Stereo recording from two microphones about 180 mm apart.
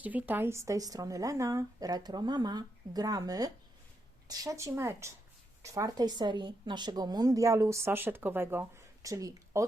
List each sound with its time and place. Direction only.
0.0 s a woman's voice: 10° right (ahead or behind)